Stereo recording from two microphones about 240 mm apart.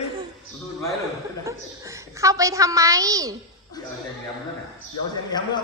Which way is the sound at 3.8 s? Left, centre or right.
Centre.